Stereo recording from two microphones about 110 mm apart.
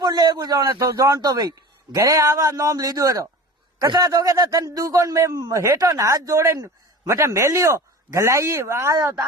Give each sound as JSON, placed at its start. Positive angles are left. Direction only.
{"t": 0.0, "sound": "a man's voice", "side_deg": -35}